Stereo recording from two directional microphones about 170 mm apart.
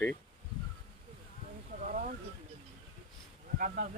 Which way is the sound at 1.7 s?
50° right (ahead or behind).